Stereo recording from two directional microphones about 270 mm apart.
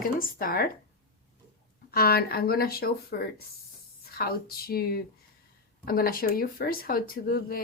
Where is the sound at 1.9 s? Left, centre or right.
Left.